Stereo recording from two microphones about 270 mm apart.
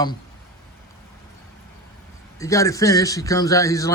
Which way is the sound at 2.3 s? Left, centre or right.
Centre.